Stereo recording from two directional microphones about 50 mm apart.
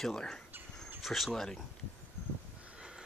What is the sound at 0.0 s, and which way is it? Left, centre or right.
Speech, centre.